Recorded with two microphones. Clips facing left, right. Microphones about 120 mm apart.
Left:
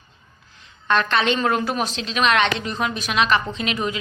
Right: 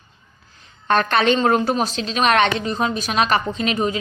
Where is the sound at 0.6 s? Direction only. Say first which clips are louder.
Right 2 dB; 40° right (ahead or behind).